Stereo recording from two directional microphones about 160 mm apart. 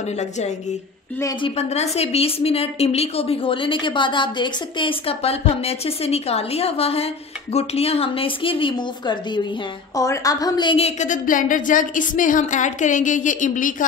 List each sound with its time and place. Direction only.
1.4 s a woman's voice: 40° left (ahead or behind)
11.0 s a woman's voice: 55° left (ahead or behind)